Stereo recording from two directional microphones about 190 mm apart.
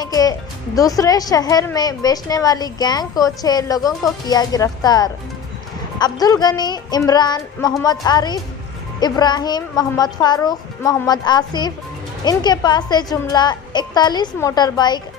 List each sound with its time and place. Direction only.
0.0 s speech: 20° left (ahead or behind)